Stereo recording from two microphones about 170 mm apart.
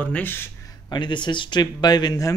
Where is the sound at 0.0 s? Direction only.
10° left (ahead or behind).